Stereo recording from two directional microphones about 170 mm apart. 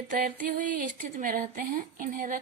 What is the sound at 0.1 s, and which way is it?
Speech, 50° right (ahead or behind).